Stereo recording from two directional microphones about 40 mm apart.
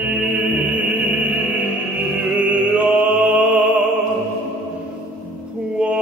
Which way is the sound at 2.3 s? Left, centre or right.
Right.